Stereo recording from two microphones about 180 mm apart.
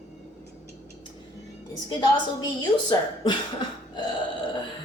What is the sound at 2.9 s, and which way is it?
Speech, 25° left (ahead or behind).